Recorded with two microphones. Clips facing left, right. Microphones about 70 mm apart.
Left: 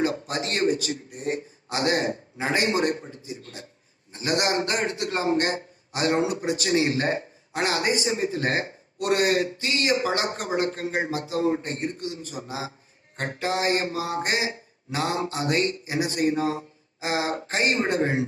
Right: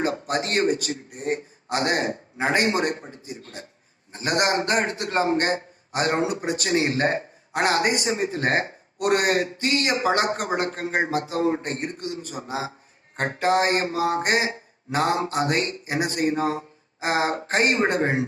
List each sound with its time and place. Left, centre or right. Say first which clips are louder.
0.0 s a man's voice: right 1 dB; right